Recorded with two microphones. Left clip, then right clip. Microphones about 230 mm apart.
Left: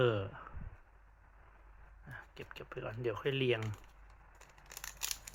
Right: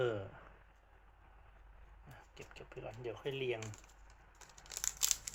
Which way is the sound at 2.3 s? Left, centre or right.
Left.